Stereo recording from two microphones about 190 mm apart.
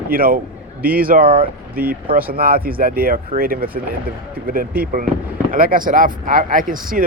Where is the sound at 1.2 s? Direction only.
30° right (ahead or behind).